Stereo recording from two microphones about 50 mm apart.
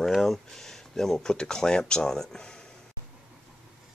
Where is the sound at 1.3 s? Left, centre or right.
Centre.